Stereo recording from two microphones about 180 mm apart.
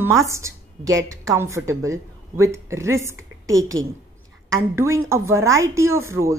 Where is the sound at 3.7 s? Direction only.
90° right.